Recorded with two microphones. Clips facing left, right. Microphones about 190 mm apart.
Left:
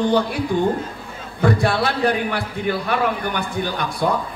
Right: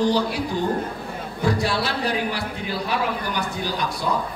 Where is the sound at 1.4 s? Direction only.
55° left (ahead or behind).